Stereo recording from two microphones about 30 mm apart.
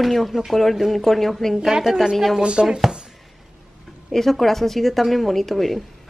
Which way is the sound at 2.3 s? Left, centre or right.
Right.